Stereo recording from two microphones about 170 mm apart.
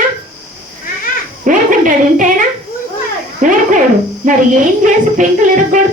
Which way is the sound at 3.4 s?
50° right (ahead or behind).